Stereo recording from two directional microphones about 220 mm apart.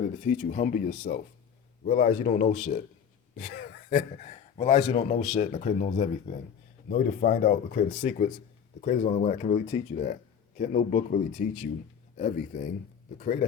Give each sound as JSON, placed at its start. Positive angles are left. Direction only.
{"t": 0.2, "sound": "speech", "side_deg": 35}